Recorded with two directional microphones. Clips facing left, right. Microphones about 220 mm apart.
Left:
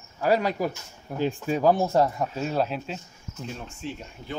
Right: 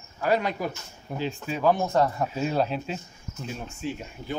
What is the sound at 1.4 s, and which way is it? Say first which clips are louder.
Speech: left 2 dB; 40° left (ahead or behind).